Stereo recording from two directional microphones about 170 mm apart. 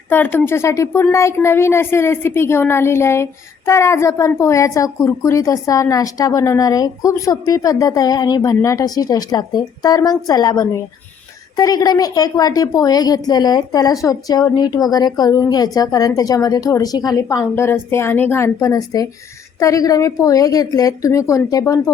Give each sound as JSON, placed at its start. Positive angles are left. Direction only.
{"t": 0.1, "sound": "a woman's voice", "side_deg": 10}